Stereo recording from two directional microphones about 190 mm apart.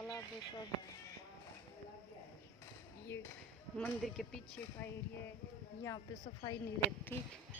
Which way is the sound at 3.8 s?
5° left (ahead or behind).